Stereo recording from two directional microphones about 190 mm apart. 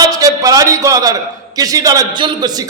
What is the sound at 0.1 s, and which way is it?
A man's voice, 20° right (ahead or behind).